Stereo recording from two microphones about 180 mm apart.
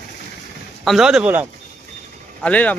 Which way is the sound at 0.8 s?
Centre (ahead or behind).